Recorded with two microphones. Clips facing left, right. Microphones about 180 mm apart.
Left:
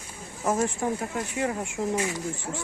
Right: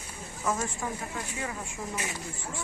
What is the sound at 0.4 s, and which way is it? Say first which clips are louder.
Speech: left 6 dB; 35° left (ahead or behind).